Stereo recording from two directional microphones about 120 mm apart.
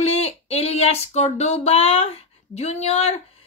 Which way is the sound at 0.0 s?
60° left (ahead or behind).